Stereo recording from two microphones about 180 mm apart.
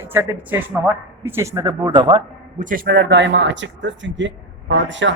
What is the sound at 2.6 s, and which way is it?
Speech, 50° right (ahead or behind).